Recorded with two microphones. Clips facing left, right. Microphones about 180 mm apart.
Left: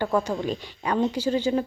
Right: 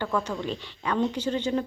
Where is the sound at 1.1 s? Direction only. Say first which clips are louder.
Left 3 dB; 10° left (ahead or behind).